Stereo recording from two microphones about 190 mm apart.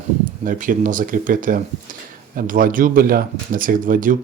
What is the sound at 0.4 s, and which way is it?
Speech, 45° right (ahead or behind).